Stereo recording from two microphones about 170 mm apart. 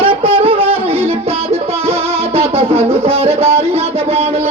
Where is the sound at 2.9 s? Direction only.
35° right (ahead or behind).